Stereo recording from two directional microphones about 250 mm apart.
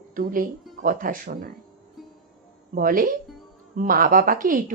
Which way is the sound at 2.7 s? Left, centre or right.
Right.